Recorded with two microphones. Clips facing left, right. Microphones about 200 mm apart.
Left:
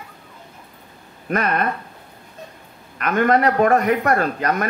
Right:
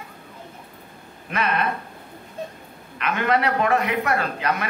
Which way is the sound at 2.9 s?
45° left (ahead or behind).